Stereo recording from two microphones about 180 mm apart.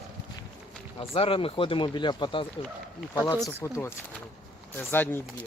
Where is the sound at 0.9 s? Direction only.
30° left (ahead or behind).